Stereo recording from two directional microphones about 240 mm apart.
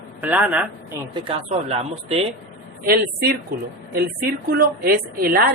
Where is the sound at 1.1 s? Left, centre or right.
Right.